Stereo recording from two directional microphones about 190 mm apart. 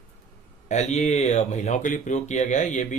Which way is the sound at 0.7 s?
35° left (ahead or behind).